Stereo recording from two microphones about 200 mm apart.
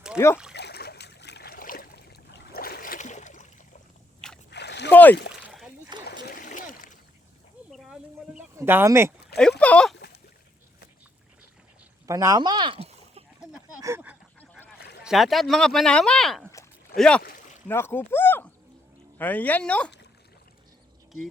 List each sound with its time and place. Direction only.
0.5 s boat: 55° left (ahead or behind); by 3.8 s 40° left (ahead or behind)
4.5 s splash: 60° left (ahead or behind)
4.9 s speech: 10° left (ahead or behind)
5.4 s a sound: 5° right (ahead or behind)
6.2 s splash: 45° left (ahead or behind)
7.7 s a sound: centre (ahead or behind)
8.5 s speech: 10° right (ahead or behind)
9.6 s speech: 5° left (ahead or behind)
12.0 s speech: 15° right (ahead or behind)
13.8 s goose: 10° right (ahead or behind)
15.0 s speech: centre (ahead or behind)